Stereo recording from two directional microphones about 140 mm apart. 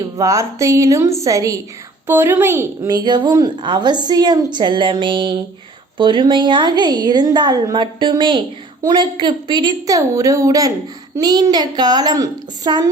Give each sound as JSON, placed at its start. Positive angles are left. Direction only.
{"t": 0.0, "sound": "a woman's voice", "side_deg": -25}